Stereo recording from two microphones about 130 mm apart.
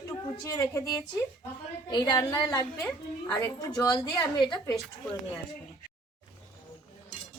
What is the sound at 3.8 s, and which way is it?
Speech, 35° left (ahead or behind).